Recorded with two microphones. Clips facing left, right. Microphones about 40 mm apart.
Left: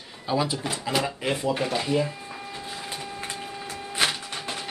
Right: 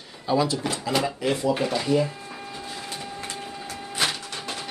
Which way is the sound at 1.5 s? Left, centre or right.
Centre.